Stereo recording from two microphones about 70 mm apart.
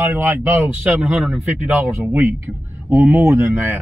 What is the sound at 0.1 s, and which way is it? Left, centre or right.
Speech, right.